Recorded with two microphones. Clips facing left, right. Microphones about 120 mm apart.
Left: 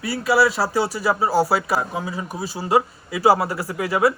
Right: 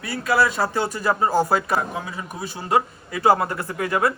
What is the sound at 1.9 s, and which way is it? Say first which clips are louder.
Speech: left 3 dB; 30° left (ahead or behind).